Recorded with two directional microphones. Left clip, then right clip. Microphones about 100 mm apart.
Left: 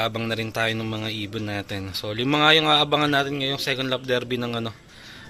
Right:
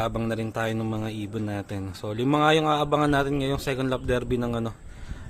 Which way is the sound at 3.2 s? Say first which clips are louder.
Left 1 dB; 75° right (ahead or behind).